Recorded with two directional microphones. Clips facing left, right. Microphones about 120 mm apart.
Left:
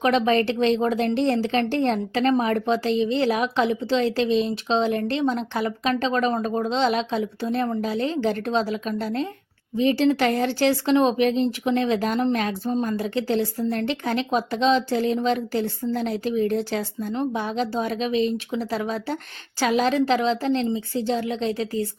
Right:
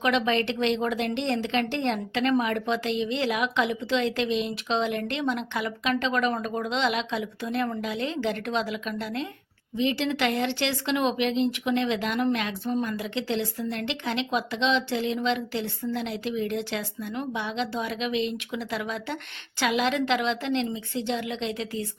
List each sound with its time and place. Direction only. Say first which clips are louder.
0.0 s speech: left 5 dB; 35° left (ahead or behind)